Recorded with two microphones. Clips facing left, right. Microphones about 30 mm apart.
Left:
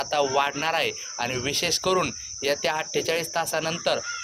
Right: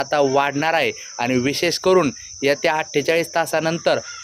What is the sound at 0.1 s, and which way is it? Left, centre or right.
Speech, centre.